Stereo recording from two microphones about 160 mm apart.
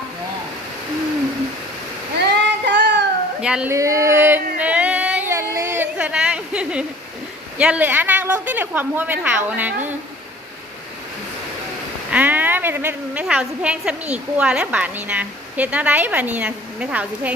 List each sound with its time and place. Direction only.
2.1 s child singing: 90° right
3.4 s speech: 5° right (ahead or behind)
3.7 s a sound: 20° right (ahead or behind)
7.6 s a woman's voice: 10° right (ahead or behind)
12.1 s a woman's voice: 10° right (ahead or behind)